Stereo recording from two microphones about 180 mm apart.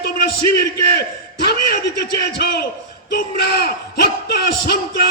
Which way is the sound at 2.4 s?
60° left (ahead or behind).